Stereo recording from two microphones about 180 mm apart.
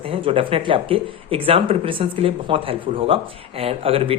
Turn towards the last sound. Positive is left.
turn(degrees=-30)  # may be behind; listen again after turning